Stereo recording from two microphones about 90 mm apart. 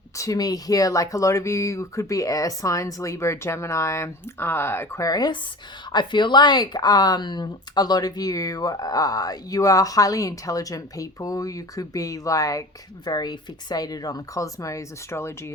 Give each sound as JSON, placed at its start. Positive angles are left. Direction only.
{"t": 0.2, "sound": "speech", "side_deg": 40}
{"t": 5.0, "sound": "speech", "side_deg": 50}
{"t": 13.1, "sound": "speech", "side_deg": 50}